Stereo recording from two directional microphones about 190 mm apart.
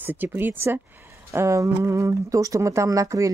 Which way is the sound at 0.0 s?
10° right (ahead or behind).